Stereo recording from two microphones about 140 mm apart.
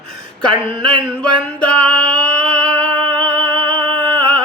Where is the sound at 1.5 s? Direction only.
10° left (ahead or behind).